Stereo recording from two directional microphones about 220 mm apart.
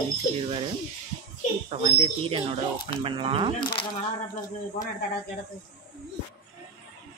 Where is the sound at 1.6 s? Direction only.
25° right (ahead or behind).